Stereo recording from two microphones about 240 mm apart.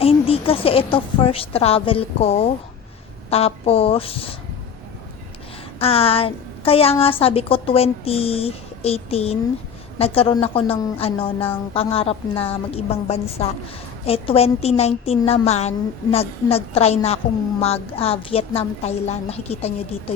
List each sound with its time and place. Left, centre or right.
0.0 s a woman's voice: left
5.8 s a woman's voice: left